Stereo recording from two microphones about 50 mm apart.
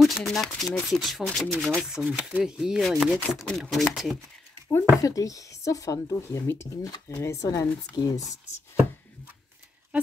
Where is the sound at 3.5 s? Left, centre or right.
Centre.